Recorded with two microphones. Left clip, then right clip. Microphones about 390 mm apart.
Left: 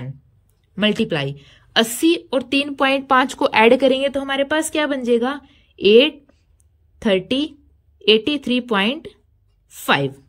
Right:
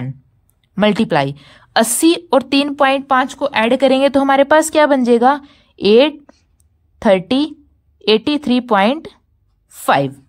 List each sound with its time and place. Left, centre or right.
0.7 s a woman's voice: centre